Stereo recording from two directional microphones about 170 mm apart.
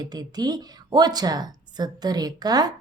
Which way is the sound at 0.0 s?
25° right (ahead or behind).